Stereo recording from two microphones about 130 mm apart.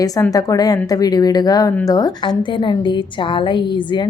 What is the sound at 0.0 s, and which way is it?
A woman's voice, 25° left (ahead or behind).